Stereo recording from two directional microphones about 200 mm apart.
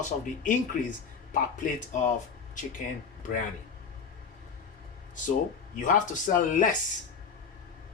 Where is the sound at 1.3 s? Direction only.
40° left (ahead or behind).